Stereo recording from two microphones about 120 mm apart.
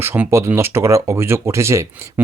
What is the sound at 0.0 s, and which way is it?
Speech, 20° right (ahead or behind).